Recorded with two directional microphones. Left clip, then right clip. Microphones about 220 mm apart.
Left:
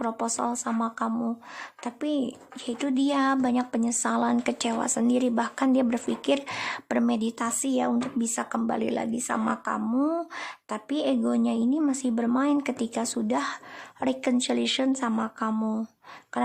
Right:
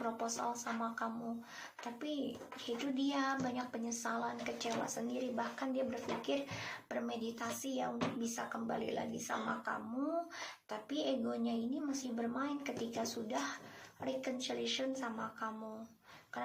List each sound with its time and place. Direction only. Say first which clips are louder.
0.3 s speech: left 11 dB; 50° left (ahead or behind)